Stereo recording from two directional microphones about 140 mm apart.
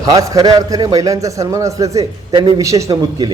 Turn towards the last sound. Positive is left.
turn(degrees=-30)  # may be behind; listen again after turning